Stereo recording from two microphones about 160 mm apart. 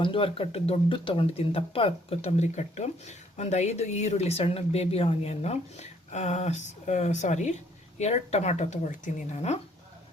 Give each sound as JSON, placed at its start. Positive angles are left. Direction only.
{"t": 0.0, "sound": "speech", "side_deg": 35}